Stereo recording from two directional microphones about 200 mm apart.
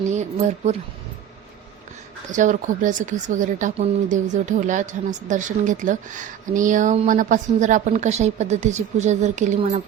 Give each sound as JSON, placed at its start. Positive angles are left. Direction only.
{"t": 0.1, "sound": "a woman's voice", "side_deg": -35}
{"t": 2.3, "sound": "speech", "side_deg": -40}